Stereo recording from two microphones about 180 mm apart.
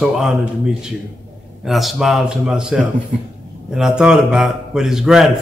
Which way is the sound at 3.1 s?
45° right (ahead or behind).